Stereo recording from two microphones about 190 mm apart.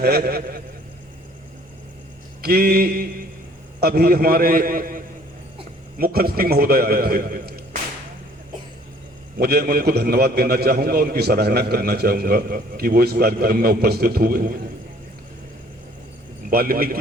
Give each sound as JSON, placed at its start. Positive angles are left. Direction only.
{"t": 0.0, "sound": "a man's voice", "side_deg": -55}
{"t": 2.4, "sound": "a man's voice", "side_deg": -55}
{"t": 9.4, "sound": "a man's voice", "side_deg": -55}
{"t": 16.5, "sound": "a man's voice", "side_deg": -50}